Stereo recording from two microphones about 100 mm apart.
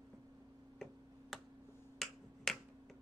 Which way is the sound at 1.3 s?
Centre (ahead or behind).